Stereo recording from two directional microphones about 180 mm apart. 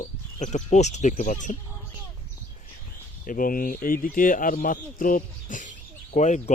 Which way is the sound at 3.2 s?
50° left (ahead or behind).